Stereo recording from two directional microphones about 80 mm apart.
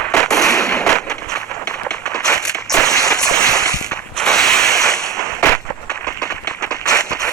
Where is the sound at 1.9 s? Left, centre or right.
Centre.